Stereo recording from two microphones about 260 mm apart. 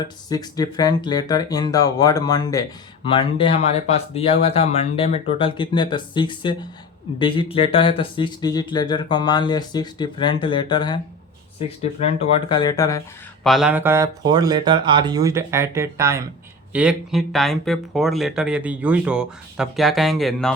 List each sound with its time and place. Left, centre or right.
0.0 s speech: centre
12.5 s speech: centre
13.4 s speech: centre